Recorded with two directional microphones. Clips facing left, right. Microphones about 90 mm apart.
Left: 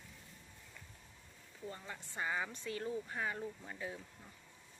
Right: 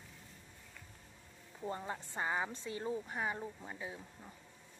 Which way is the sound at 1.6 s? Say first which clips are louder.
Right 6 dB; 35° right (ahead or behind).